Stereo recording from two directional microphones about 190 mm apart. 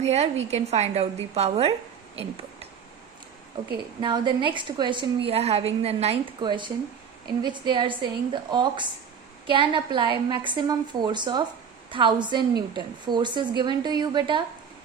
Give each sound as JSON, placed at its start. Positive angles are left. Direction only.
{"t": 0.0, "sound": "a woman's voice", "side_deg": -35}
{"t": 4.0, "sound": "a woman's voice", "side_deg": -25}